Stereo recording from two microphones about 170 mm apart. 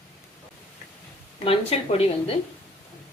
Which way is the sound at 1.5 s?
35° left (ahead or behind).